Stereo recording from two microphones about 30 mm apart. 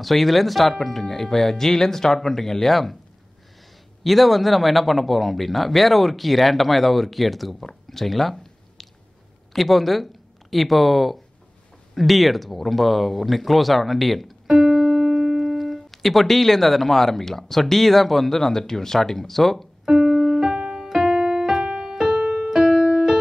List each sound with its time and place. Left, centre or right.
0.0 s speech: centre
4.0 s speech: centre
7.6 s a sound: centre
9.5 s speech: centre
14.6 s keyboard: right
15.5 s speech: centre
19.9 s music: centre
20.5 s music: centre
20.9 s piano: centre
21.2 s keyboard: centre
21.6 s piano: centre
22.5 s music: centre